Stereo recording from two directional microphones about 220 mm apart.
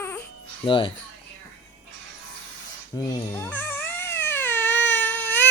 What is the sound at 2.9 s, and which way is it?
Crying, 15° left (ahead or behind).